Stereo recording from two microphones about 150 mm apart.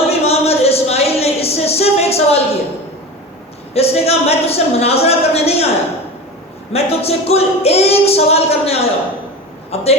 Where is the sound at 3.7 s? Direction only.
45° left (ahead or behind).